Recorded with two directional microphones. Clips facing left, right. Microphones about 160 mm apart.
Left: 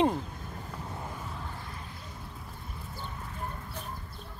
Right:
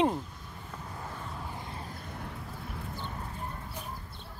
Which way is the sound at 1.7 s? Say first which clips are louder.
Right 3 dB; 40° right (ahead or behind).